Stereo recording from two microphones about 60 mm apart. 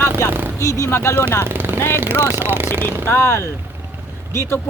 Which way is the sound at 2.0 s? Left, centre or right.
Right.